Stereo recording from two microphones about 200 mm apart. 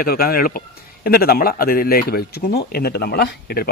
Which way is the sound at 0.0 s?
50° left (ahead or behind).